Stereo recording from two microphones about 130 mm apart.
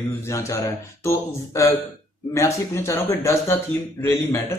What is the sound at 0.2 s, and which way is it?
A man's voice, 25° left (ahead or behind).